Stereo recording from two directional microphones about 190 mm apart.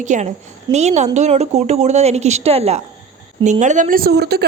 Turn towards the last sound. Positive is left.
turn(degrees=-55)  # may be behind; listen again after turning